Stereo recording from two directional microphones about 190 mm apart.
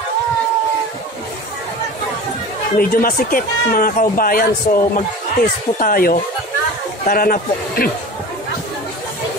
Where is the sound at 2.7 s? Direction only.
50° left (ahead or behind).